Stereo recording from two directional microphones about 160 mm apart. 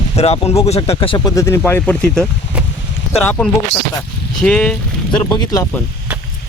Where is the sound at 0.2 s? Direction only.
40° left (ahead or behind).